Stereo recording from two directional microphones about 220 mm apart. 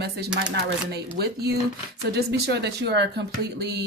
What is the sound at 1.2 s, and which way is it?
Speech, 45° right (ahead or behind).